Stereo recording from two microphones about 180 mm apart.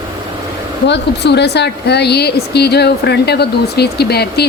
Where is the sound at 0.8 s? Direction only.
70° left (ahead or behind).